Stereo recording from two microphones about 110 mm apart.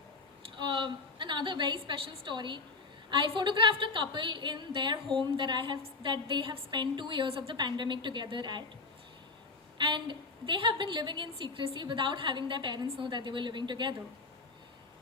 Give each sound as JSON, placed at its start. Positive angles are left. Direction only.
{"t": 0.6, "sound": "a woman's voice", "side_deg": -45}
{"t": 9.7, "sound": "a woman's voice", "side_deg": -45}